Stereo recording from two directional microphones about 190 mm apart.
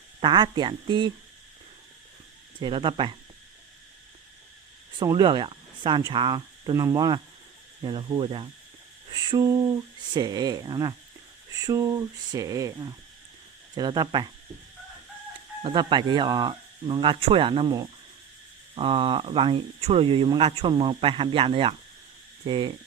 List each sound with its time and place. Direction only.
0.2 s speech: 25° right (ahead or behind)
2.6 s speech: 25° right (ahead or behind)
4.9 s speech: 25° right (ahead or behind)
15.6 s speech: 25° right (ahead or behind)